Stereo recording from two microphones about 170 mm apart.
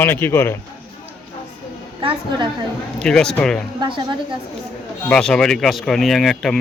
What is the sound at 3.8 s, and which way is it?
Speech, 30° right (ahead or behind).